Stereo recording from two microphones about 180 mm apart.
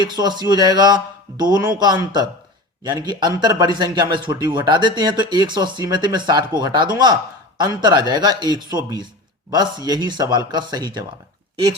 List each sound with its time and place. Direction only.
0.0 s speech: 25° right (ahead or behind)